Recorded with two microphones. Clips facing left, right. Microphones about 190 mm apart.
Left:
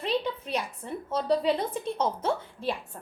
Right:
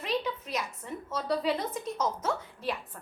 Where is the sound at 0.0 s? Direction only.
30° left (ahead or behind).